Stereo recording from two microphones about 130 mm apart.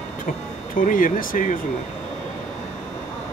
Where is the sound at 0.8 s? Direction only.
90° left.